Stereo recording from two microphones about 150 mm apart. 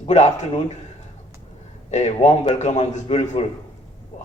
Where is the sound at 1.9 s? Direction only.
50° left (ahead or behind).